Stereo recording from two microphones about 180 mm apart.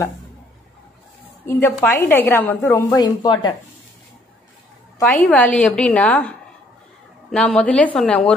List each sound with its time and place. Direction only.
1.4 s a woman's voice: 15° left (ahead or behind)
5.1 s speech: 5° left (ahead or behind)